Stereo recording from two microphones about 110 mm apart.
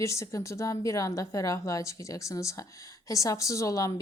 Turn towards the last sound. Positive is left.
turn(degrees=30)  # may be behind; listen again after turning